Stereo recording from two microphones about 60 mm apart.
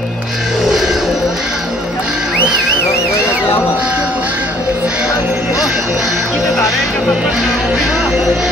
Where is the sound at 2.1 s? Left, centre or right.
Centre.